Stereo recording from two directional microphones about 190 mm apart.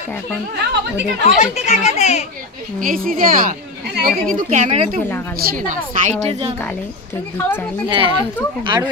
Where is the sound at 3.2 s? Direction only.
50° right (ahead or behind).